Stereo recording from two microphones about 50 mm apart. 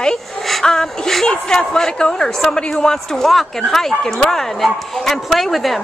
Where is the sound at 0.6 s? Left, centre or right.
Centre.